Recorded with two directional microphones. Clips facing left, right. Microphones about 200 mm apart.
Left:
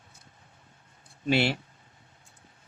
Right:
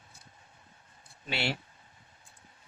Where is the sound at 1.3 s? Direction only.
60° left (ahead or behind).